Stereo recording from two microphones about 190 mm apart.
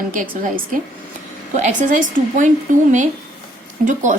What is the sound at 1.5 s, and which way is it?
Speech, 40° right (ahead or behind).